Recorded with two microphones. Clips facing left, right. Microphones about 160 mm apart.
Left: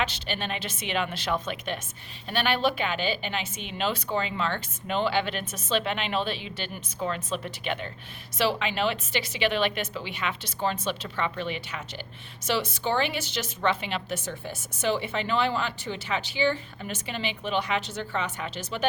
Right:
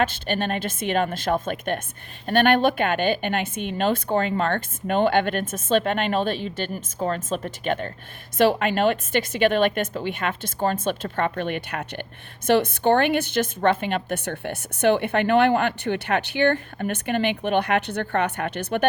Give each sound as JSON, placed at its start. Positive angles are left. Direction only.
{"t": 0.0, "sound": "a woman's voice", "side_deg": -50}